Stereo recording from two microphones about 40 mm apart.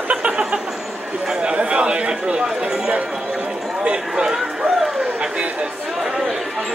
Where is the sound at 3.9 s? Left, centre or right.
Centre.